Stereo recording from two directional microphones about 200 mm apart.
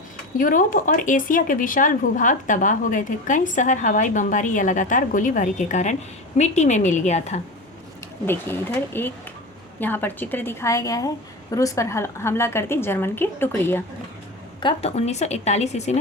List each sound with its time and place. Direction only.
0.3 s speech: 40° left (ahead or behind)
8.3 s a woman's voice: 10° left (ahead or behind)
14.6 s speech: 25° left (ahead or behind)